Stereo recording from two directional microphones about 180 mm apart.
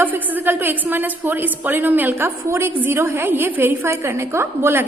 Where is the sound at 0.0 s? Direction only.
10° right (ahead or behind).